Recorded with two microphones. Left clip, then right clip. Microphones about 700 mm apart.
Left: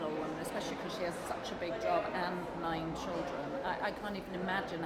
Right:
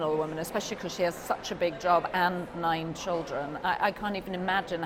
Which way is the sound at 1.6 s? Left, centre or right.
Right.